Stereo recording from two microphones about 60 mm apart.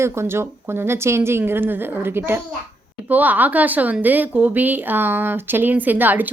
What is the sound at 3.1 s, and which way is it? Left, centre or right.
A woman's voice, right.